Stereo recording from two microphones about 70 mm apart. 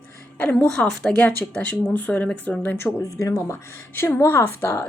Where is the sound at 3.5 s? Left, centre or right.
Left.